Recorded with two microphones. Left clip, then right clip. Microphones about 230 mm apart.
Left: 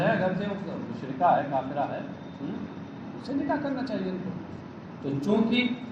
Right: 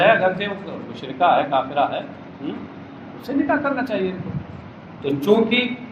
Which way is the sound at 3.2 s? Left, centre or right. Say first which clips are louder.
Right 9 dB; right.